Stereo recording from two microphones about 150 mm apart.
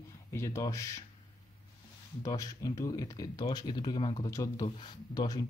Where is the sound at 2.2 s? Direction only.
25° left (ahead or behind).